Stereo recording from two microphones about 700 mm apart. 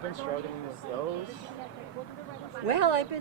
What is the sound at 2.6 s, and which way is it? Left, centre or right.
Speech, left.